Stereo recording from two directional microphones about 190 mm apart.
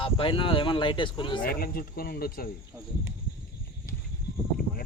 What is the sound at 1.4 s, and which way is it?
Speech, 50° left (ahead or behind).